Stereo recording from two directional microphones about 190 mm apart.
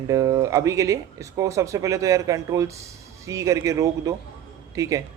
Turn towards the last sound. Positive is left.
turn(degrees=-15)  # may be behind; listen again after turning